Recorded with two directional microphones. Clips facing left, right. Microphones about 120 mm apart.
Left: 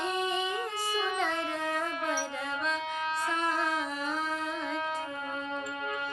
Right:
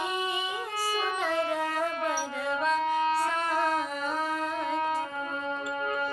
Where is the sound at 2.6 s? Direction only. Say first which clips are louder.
Right 9 dB; 40° right (ahead or behind).